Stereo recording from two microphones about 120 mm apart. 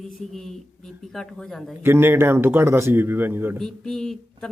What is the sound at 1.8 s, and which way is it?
Speech, 20° right (ahead or behind).